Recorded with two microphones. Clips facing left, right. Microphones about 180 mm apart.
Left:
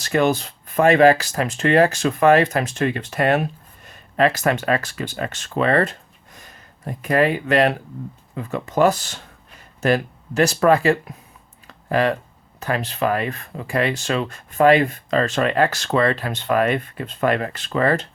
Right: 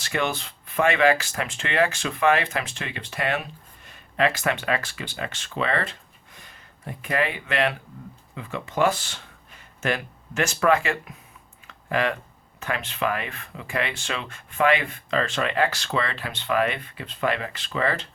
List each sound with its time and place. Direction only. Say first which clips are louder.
0.0 s speech: left 8 dB; 40° left (ahead or behind)